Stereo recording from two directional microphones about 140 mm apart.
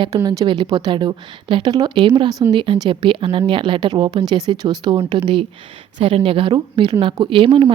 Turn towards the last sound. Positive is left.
turn(degrees=-40)  # may be behind; listen again after turning